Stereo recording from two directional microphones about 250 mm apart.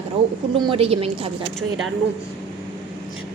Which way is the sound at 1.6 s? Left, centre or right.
Centre.